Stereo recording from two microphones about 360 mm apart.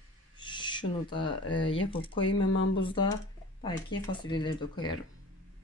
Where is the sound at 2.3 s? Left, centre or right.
Left.